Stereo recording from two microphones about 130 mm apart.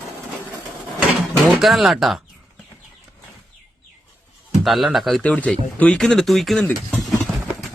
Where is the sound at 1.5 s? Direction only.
Centre (ahead or behind).